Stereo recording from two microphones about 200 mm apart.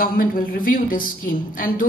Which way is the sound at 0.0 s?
45° left (ahead or behind).